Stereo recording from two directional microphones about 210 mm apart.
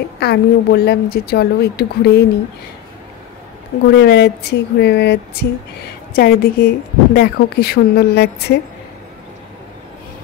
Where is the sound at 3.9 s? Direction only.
50° left (ahead or behind).